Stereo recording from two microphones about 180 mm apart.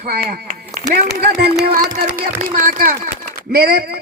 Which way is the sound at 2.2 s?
50° right (ahead or behind).